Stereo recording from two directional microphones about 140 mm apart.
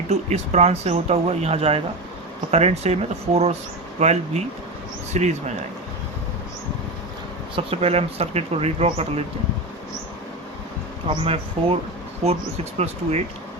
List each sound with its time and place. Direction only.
0.1 s speech: 55° right (ahead or behind)
7.5 s speech: 45° right (ahead or behind)
11.1 s speech: 40° right (ahead or behind)
12.8 s speech: 50° right (ahead or behind)